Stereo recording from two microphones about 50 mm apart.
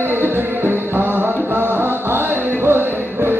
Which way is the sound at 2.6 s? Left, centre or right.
Right.